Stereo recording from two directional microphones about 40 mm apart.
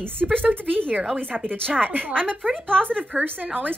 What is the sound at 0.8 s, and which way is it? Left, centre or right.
A woman's voice, right.